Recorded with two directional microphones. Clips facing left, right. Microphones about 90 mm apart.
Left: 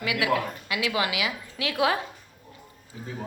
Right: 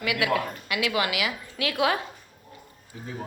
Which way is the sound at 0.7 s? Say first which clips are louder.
Right 1 dB; 25° left (ahead or behind).